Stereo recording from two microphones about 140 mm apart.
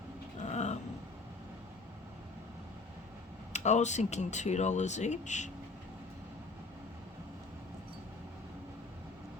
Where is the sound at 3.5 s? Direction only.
55° left (ahead or behind).